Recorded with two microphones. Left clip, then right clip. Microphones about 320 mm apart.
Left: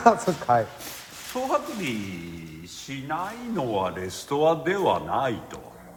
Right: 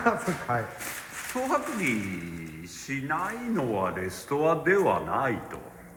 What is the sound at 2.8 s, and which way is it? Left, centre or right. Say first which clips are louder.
Speech: right 1 dB; left.